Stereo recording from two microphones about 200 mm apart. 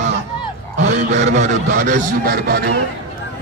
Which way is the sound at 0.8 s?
65° right (ahead or behind).